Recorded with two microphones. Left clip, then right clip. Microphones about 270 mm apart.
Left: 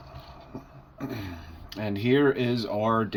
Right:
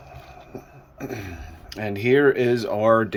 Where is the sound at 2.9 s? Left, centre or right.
Centre.